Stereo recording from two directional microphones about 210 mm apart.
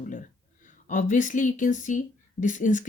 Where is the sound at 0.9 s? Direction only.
35° left (ahead or behind).